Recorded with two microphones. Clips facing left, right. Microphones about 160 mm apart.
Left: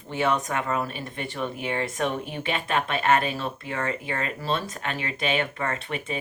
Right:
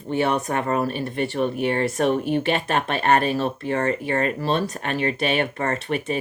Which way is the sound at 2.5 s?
40° right (ahead or behind).